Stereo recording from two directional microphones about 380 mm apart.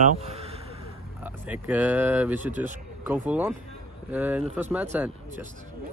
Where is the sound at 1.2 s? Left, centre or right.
Centre.